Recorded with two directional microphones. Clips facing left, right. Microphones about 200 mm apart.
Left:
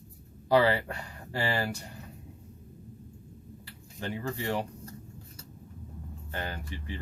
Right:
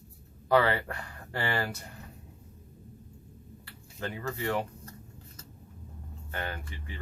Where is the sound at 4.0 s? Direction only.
30° left (ahead or behind).